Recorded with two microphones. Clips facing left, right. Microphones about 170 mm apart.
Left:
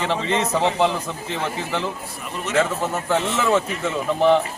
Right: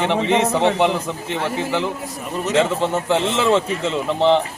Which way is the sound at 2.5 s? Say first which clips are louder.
Right 3 dB; 25° right (ahead or behind).